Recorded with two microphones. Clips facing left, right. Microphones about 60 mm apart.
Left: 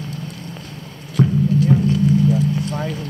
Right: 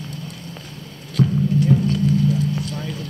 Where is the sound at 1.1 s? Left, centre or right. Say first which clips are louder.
Left 2 dB; centre.